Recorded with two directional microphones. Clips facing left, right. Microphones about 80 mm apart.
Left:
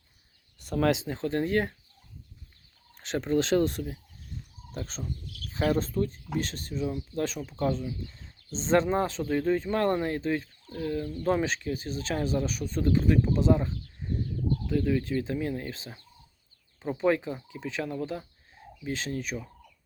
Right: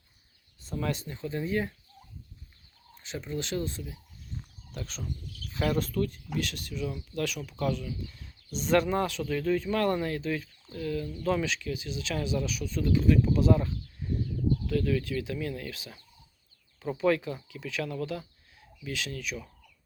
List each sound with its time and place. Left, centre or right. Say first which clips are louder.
0.6 s speech: left 7 dB; left
3.0 s speech: left 9 dB; left
4.7 s speech: left 2 dB; left